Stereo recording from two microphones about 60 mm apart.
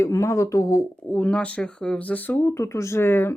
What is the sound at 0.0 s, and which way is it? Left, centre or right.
Speech, left.